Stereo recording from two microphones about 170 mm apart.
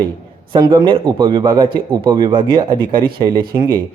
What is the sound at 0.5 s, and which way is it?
A man's voice, 25° right (ahead or behind).